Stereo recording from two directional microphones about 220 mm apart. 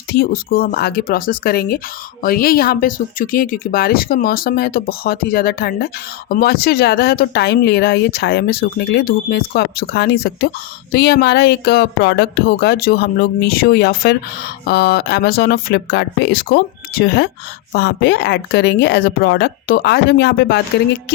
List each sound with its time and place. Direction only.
0.1 s speech: 45° left (ahead or behind)